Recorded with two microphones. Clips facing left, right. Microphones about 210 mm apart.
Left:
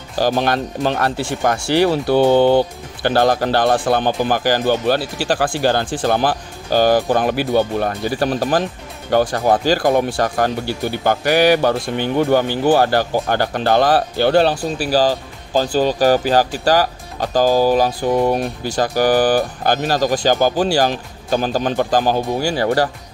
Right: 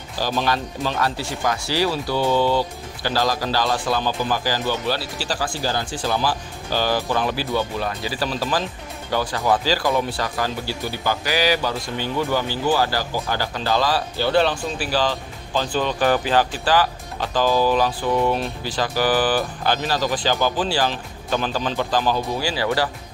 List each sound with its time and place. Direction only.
0.2 s speech: 55° left (ahead or behind)
14.4 s speech: 40° left (ahead or behind)